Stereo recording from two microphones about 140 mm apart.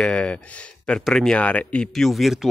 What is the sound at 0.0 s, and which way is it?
Speech, 10° left (ahead or behind).